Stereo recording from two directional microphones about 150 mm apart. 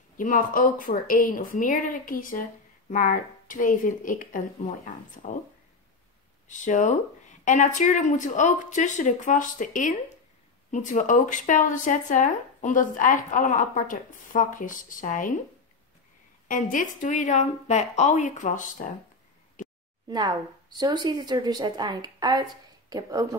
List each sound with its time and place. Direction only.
0.2 s speech: 65° left (ahead or behind)
6.4 s speech: 55° left (ahead or behind)
16.4 s speech: 60° left (ahead or behind)
20.1 s a woman's voice: 30° right (ahead or behind)